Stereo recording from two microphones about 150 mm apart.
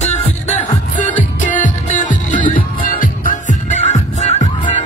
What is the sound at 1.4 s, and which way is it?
Music, 55° left (ahead or behind).